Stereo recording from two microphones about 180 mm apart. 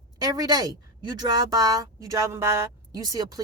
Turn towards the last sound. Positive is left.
turn(degrees=-20)  # may be behind; listen again after turning